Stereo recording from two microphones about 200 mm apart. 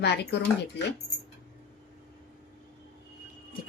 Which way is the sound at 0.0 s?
55° left (ahead or behind).